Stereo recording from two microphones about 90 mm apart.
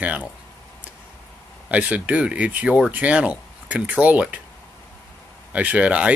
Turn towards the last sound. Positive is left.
turn(degrees=-15)  # may be behind; listen again after turning